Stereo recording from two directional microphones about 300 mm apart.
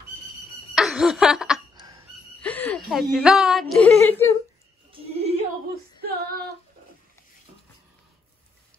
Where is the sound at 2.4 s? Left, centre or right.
Centre.